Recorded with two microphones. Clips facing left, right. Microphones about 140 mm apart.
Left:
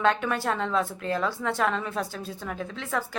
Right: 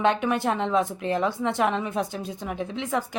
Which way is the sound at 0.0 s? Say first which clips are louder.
Right 2 dB; 20° right (ahead or behind).